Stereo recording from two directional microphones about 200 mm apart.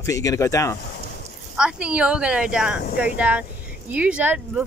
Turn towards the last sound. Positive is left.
turn(degrees=-5)  # may be behind; listen again after turning